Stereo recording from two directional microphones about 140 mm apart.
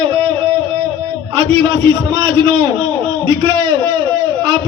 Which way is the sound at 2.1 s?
30° right (ahead or behind).